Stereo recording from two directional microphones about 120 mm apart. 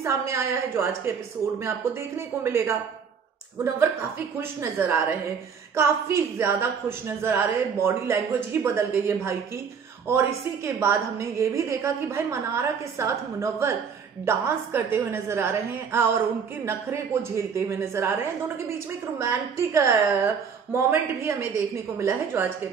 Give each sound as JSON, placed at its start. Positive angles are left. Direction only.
{"t": 0.0, "sound": "a woman's voice", "side_deg": -20}
{"t": 2.1, "sound": "a woman's voice", "side_deg": -20}